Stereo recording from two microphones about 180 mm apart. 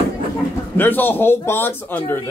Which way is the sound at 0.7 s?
10° left (ahead or behind).